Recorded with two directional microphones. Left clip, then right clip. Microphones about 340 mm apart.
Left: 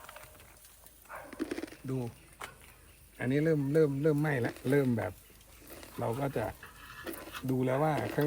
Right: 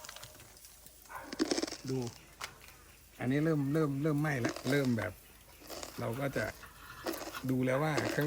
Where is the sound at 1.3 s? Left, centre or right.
Centre.